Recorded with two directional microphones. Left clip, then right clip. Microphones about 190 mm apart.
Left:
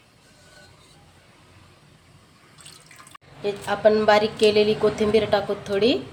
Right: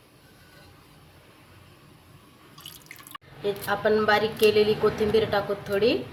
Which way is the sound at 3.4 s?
20° left (ahead or behind).